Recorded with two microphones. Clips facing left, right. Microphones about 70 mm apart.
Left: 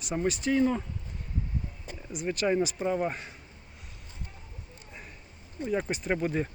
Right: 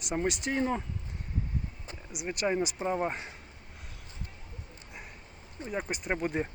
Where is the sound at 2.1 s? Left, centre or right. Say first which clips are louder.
Left 3 dB; centre.